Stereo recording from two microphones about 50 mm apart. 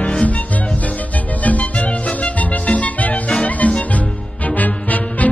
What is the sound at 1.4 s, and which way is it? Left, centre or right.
Music, left.